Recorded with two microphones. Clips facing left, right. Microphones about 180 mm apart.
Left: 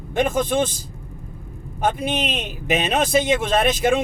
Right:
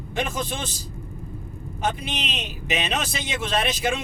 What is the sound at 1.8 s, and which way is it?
Speech, 50° left (ahead or behind).